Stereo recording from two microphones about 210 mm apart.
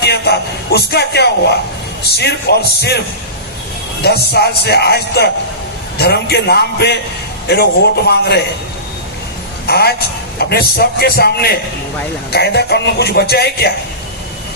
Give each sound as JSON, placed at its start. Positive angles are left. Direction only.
{"t": 0.0, "sound": "music", "side_deg": 50}
{"t": 0.9, "sound": "a man's voice", "side_deg": 50}
{"t": 4.0, "sound": "a man's voice", "side_deg": 50}
{"t": 9.6, "sound": "a man's voice", "side_deg": 50}